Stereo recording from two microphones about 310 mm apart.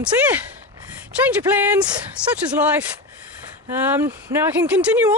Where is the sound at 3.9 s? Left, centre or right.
Centre.